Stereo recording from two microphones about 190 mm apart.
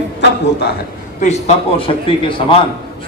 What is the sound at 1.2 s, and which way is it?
A man's voice, 35° left (ahead or behind).